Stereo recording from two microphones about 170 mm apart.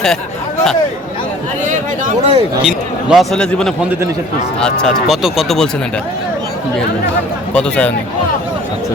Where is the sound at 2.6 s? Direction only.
Centre (ahead or behind).